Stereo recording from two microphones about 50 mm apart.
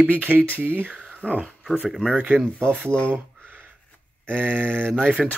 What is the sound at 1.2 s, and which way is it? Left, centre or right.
Speech, centre.